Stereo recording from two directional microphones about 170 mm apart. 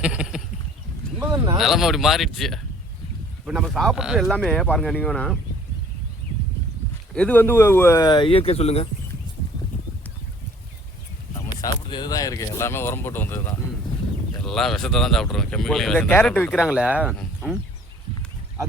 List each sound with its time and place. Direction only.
0.0 s a sound: 5° right (ahead or behind)
1.5 s speech: centre (ahead or behind)
7.1 s speech: 5° left (ahead or behind); by 8.9 s 35° left (ahead or behind)
11.6 s speech: 25° left (ahead or behind)
14.4 s speech: 5° left (ahead or behind)
16.6 s speech: 5° right (ahead or behind)